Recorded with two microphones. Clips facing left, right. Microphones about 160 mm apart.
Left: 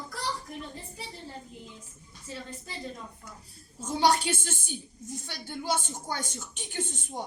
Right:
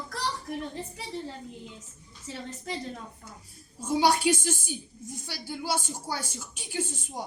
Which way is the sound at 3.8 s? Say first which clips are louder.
Right 1 dB; 10° right (ahead or behind).